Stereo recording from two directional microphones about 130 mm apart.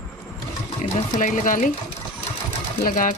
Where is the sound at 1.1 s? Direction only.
75° left (ahead or behind).